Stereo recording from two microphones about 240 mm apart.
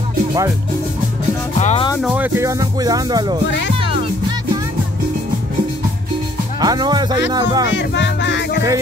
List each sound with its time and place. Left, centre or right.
1.6 s speech: left
2.0 s speech: centre
6.6 s speech: centre
7.7 s music: left